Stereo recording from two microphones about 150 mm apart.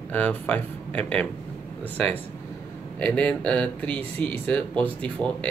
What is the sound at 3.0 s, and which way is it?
Speech, 10° left (ahead or behind).